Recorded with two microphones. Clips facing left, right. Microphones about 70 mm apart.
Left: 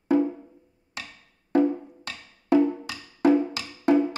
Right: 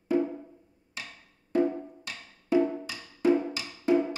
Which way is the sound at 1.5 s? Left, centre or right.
Left.